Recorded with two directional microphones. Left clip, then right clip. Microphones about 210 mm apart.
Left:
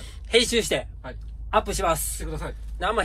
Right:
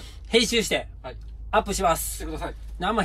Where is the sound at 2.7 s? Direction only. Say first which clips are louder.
Left 1 dB; 5° right (ahead or behind).